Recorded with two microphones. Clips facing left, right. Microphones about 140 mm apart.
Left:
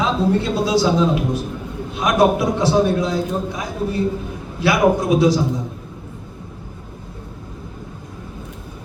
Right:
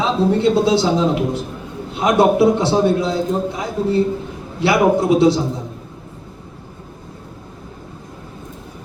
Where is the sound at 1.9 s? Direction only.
25° right (ahead or behind).